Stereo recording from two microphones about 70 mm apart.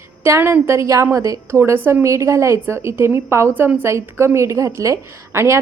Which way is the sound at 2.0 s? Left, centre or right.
Right.